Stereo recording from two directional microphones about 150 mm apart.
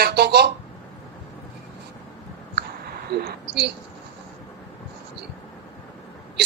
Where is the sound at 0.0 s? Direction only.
90° right.